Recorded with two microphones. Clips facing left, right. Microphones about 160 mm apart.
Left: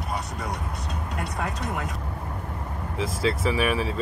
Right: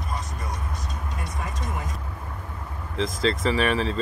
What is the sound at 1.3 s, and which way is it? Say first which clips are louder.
Speech: left 4 dB; 70° left (ahead or behind).